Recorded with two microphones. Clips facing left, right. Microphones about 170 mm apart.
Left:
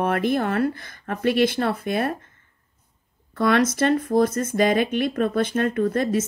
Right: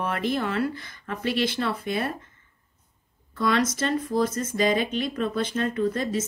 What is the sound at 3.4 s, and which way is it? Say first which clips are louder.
Speech: left 5 dB; 60° left (ahead or behind).